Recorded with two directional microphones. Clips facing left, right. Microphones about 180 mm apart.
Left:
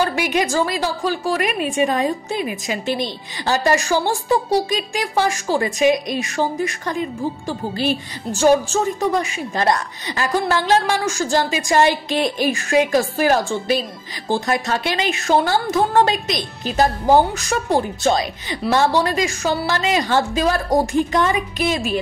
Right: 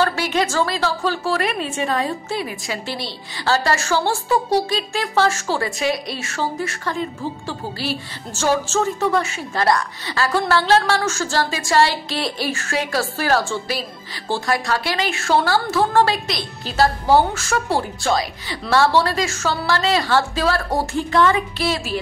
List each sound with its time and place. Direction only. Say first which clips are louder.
0.0 s a woman's voice: even; 15° left (ahead or behind)